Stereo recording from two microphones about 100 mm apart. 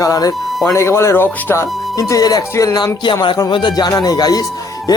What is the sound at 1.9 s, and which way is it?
Speech, 35° left (ahead or behind).